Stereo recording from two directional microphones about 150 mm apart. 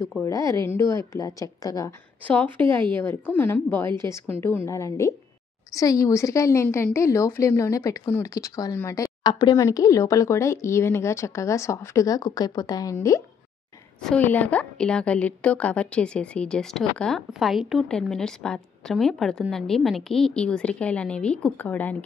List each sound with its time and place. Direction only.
0.2 s a woman's voice: 20° left (ahead or behind)
2.2 s a woman's voice: 10° left (ahead or behind)
14.0 s a woman's voice: 10° left (ahead or behind)